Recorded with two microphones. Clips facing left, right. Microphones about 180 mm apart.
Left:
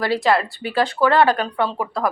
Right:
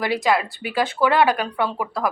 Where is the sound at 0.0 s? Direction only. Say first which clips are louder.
Left 2 dB; 15° right (ahead or behind).